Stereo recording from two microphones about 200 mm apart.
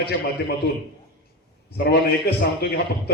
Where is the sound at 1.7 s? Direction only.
55° left (ahead or behind).